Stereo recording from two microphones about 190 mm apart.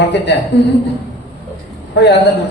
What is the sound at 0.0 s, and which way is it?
Speech, 65° left (ahead or behind).